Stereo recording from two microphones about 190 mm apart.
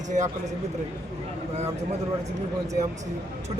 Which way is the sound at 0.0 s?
40° right (ahead or behind).